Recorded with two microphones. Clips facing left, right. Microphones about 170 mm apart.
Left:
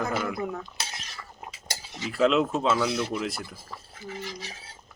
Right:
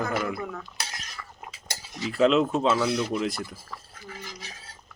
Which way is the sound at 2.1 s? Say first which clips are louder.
Right 2 dB; centre (ahead or behind).